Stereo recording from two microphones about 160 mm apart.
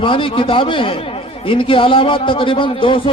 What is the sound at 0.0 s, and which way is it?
A man's voice, 35° left (ahead or behind).